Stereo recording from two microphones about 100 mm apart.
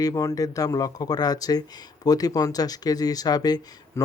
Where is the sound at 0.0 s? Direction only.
35° left (ahead or behind).